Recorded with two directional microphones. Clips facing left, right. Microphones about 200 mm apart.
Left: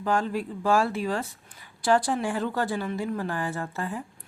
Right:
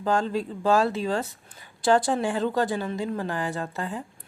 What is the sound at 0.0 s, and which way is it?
Speech, 25° right (ahead or behind).